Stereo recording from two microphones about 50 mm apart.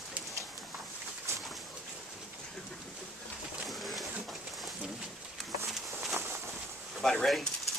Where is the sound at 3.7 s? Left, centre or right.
Centre.